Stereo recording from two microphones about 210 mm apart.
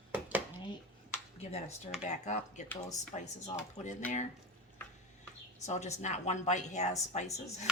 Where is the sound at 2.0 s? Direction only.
35° left (ahead or behind).